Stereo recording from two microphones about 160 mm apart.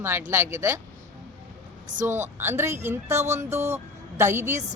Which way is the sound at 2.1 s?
15° right (ahead or behind).